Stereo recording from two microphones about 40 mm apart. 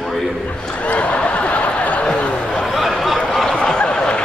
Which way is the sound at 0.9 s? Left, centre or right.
Left.